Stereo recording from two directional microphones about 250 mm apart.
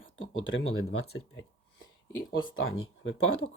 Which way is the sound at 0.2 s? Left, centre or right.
Left.